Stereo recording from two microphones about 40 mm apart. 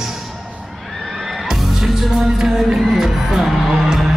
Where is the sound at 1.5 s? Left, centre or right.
Centre.